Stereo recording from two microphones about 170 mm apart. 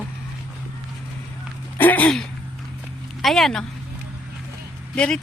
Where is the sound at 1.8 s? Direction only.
10° left (ahead or behind).